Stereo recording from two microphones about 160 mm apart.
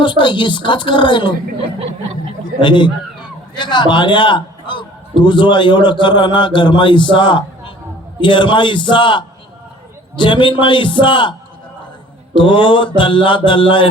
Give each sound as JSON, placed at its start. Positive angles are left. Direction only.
{"t": 0.0, "sound": "a man's voice", "side_deg": 30}
{"t": 2.6, "sound": "a man's voice", "side_deg": 30}
{"t": 12.4, "sound": "a man's voice", "side_deg": 30}